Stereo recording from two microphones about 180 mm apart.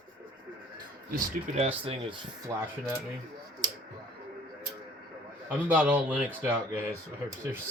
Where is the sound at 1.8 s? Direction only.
30° right (ahead or behind).